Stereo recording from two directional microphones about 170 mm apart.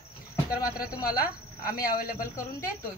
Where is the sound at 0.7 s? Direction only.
60° left (ahead or behind).